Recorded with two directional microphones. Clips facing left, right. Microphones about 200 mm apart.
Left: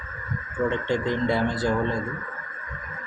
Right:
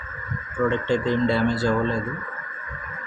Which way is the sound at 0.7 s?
15° left (ahead or behind).